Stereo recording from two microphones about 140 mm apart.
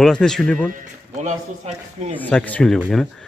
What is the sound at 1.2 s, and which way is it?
Speech, 55° right (ahead or behind).